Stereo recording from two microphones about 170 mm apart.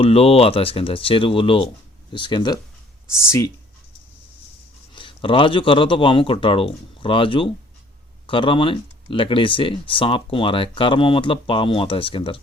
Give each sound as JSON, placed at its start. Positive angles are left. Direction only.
{"t": 0.0, "sound": "speech", "side_deg": 35}
{"t": 3.1, "sound": "speech", "side_deg": 15}
{"t": 4.9, "sound": "speech", "side_deg": 30}